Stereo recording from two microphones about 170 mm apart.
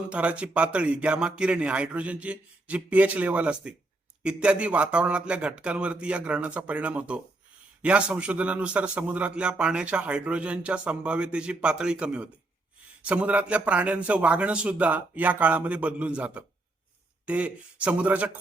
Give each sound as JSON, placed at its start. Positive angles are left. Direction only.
{"t": 0.1, "sound": "a man's voice", "side_deg": -5}